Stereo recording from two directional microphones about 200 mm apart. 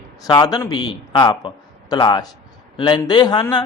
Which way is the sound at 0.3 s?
20° left (ahead or behind).